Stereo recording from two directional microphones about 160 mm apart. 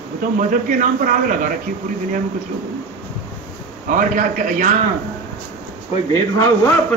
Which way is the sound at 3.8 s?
55° right (ahead or behind).